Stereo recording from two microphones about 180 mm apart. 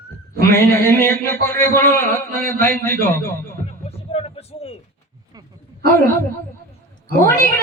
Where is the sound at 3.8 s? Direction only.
35° left (ahead or behind).